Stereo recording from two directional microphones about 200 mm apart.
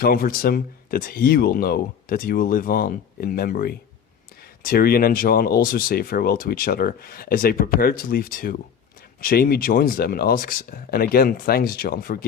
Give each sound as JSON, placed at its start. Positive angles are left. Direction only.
{"t": 0.0, "sound": "speech", "side_deg": 45}